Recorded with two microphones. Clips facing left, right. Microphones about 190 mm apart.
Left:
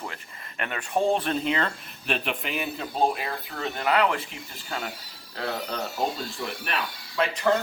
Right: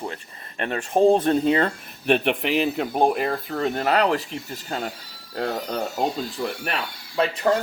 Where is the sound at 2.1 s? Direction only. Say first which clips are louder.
Right 9 dB; 60° right (ahead or behind); by 6.7 s 35° right (ahead or behind).